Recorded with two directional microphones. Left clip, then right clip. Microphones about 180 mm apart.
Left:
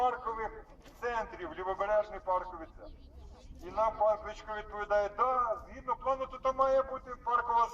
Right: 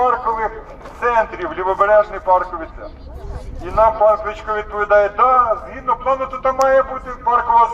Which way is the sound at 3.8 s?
55° left (ahead or behind).